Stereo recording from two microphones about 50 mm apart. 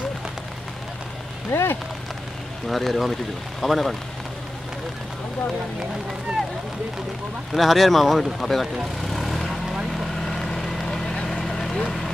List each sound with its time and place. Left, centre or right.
1.5 s speech: left
2.7 s speech: centre
7.5 s speech: centre
9.1 s vehicle: centre